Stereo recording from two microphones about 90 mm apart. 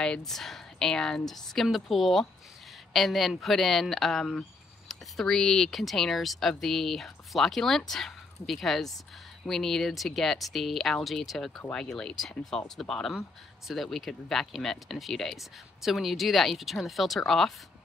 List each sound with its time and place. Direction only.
0.0 s speech: 5° left (ahead or behind)